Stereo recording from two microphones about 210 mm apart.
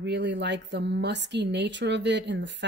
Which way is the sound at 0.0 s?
55° right (ahead or behind).